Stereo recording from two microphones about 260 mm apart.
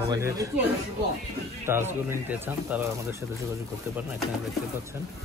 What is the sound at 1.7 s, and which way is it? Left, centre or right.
Speech, centre.